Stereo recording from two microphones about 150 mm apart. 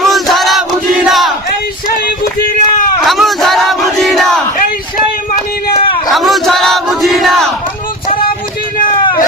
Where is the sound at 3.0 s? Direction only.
Centre (ahead or behind).